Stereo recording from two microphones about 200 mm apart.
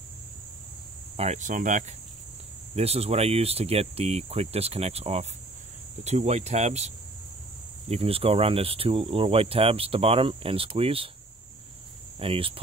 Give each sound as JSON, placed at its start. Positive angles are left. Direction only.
{"t": 1.1, "sound": "speech", "side_deg": -35}
{"t": 7.9, "sound": "speech", "side_deg": -30}
{"t": 12.2, "sound": "speech", "side_deg": -25}